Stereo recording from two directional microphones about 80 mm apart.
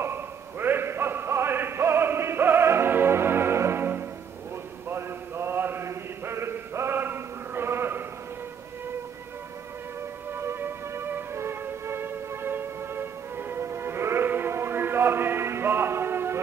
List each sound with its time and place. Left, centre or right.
0.0 s a sound: right
4.8 s mantra: right
10.3 s music: right